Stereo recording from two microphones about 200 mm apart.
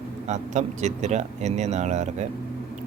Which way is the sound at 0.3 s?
35° right (ahead or behind).